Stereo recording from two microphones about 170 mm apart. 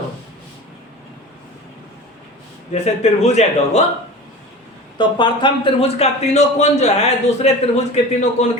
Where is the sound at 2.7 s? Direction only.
40° left (ahead or behind).